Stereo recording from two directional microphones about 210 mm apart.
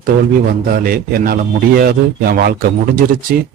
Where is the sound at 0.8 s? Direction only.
45° right (ahead or behind).